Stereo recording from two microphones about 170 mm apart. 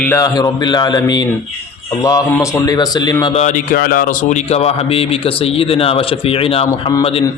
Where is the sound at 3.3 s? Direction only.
45° left (ahead or behind).